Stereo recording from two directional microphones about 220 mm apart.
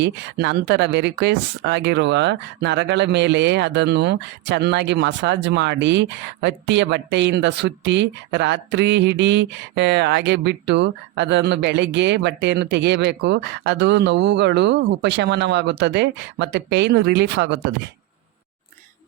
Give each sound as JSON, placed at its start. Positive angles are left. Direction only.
{"t": 0.0, "sound": "speech", "side_deg": -50}